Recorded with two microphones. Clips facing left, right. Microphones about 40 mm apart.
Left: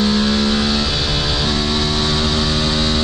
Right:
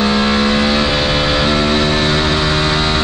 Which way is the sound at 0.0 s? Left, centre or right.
Right.